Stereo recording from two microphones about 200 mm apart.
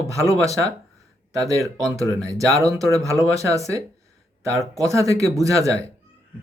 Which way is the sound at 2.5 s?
15° right (ahead or behind).